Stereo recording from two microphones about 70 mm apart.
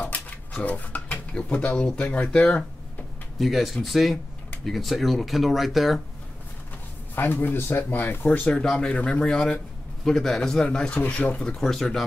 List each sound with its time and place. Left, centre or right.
0.0 s speech: left
3.3 s speech: centre
7.2 s speech: left; by 12.0 s centre